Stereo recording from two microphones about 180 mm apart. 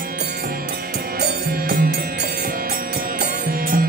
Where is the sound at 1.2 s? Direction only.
60° right (ahead or behind).